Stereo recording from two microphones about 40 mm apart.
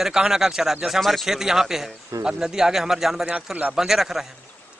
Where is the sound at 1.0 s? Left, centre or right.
Centre.